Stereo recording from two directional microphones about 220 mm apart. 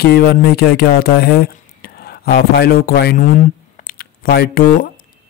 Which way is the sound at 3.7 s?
40° left (ahead or behind).